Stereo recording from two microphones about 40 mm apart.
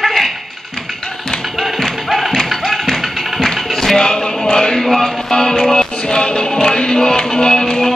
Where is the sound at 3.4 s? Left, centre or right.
Centre.